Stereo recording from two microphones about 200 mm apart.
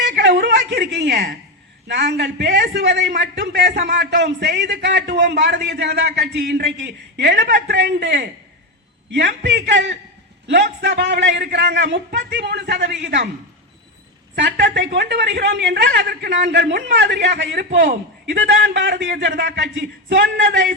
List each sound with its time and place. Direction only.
0.0 s a sound: 60° right (ahead or behind)
0.5 s a man's voice: 55° right (ahead or behind)
14.3 s a man's voice: 65° right (ahead or behind)